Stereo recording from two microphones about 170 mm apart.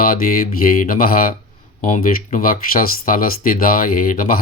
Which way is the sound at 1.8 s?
45° left (ahead or behind).